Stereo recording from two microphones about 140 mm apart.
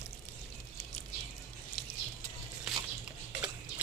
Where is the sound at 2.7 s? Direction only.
5° right (ahead or behind).